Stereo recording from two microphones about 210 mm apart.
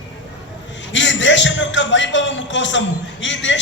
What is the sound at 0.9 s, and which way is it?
A man's voice, 60° left (ahead or behind).